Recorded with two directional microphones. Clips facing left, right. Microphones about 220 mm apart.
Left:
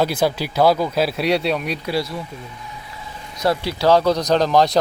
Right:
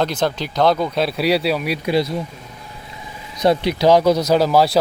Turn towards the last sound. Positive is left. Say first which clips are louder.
# right 1 dB
turn(degrees=-5)  # may be behind; listen again after turning